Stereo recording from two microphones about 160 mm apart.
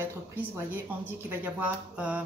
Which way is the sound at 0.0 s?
10° right (ahead or behind).